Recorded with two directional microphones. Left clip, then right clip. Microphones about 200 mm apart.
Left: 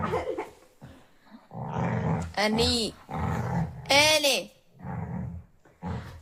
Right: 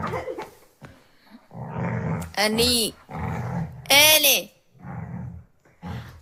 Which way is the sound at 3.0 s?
15° left (ahead or behind).